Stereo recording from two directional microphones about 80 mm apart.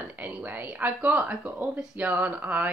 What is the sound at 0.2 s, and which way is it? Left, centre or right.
Speech, right.